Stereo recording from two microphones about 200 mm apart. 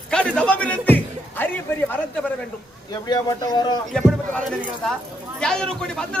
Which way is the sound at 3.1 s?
20° left (ahead or behind).